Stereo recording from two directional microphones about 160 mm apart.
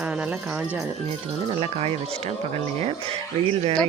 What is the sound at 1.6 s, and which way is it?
Speech, 35° right (ahead or behind).